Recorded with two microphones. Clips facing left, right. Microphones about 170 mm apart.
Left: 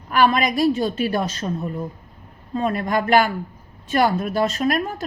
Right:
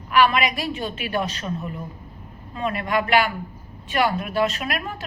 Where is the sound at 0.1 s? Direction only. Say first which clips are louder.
Left 1 dB; 40° left (ahead or behind).